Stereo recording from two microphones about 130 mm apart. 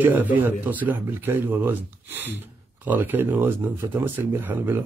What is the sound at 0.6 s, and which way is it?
Speech, 15° right (ahead or behind).